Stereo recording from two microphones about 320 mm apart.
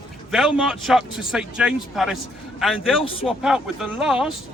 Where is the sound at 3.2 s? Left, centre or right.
Centre.